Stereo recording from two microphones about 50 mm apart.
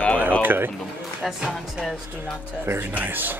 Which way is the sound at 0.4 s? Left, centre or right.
Right.